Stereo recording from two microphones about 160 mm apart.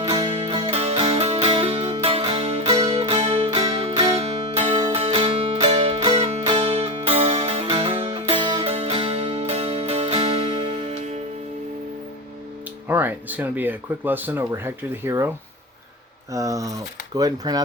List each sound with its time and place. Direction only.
0.2 s music: 35° right (ahead or behind)
12.9 s speech: 10° right (ahead or behind)
16.3 s speech: 20° right (ahead or behind)